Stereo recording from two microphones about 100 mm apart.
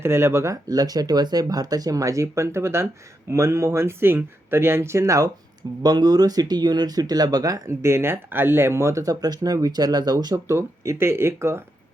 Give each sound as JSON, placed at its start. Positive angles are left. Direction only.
{"t": 0.0, "sound": "speech", "side_deg": -25}
{"t": 10.3, "sound": "speech", "side_deg": -30}